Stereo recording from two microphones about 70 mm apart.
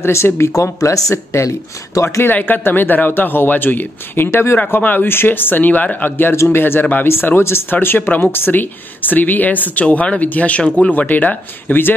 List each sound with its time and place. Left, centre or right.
0.0 s speech: left